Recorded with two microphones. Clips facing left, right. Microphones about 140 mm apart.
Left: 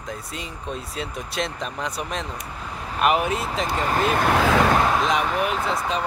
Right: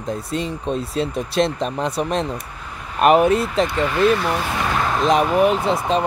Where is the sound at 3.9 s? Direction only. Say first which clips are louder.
Right 2 dB; 45° left (ahead or behind).